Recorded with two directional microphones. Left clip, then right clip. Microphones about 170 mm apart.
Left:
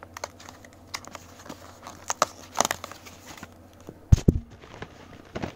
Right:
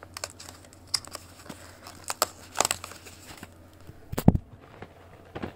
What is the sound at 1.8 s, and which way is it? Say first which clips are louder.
Biting: left 4 dB; 20° left (ahead or behind).